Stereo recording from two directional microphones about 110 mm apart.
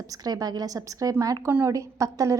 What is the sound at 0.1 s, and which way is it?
A woman's voice, 35° right (ahead or behind).